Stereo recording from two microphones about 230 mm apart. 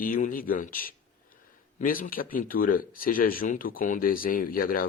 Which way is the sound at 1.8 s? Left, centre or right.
Left.